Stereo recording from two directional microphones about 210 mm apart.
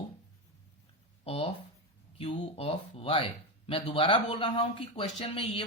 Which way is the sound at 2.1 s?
25° left (ahead or behind).